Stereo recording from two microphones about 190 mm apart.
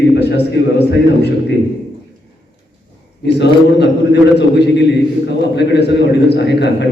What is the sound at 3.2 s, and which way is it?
A man's voice, 65° left (ahead or behind).